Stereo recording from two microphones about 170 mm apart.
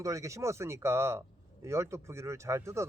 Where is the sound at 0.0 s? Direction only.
20° right (ahead or behind).